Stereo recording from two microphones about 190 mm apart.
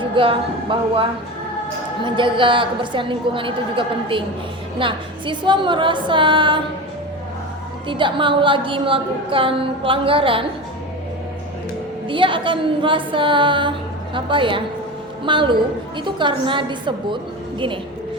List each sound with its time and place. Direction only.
0.0 s a woman's voice: 25° right (ahead or behind)
2.0 s a woman's voice: 25° right (ahead or behind)
7.9 s a woman's voice: 25° right (ahead or behind)
12.0 s a woman's voice: 25° right (ahead or behind)